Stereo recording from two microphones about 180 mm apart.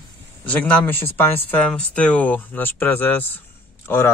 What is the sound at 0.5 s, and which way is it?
Speech, 10° left (ahead or behind).